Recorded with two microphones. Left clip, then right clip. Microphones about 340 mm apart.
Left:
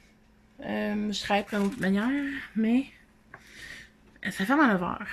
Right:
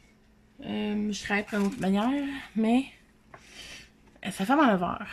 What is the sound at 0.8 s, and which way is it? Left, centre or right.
Speech, centre.